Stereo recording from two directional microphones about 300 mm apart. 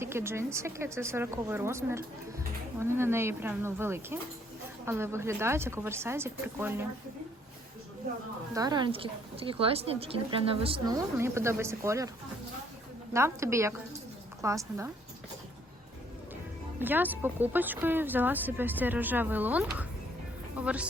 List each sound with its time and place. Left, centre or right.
0.0 s a woman's voice: centre
8.5 s a woman's voice: centre
13.1 s a woman's voice: centre
16.8 s speech: centre